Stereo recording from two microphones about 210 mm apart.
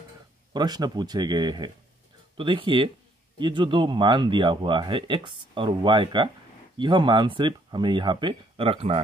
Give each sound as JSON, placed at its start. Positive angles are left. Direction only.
{"t": 0.5, "sound": "speech", "side_deg": -20}